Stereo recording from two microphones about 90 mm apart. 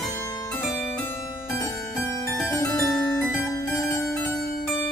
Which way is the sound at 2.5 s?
40° left (ahead or behind).